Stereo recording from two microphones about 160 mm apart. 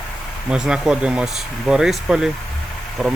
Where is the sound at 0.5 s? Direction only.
5° right (ahead or behind).